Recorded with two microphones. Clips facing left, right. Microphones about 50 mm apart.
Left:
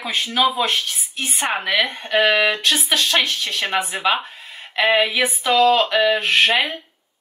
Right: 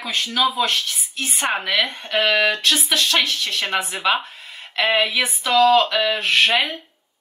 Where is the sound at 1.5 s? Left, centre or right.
Centre.